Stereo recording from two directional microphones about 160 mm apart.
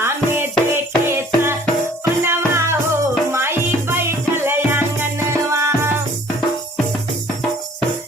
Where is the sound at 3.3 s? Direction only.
15° right (ahead or behind).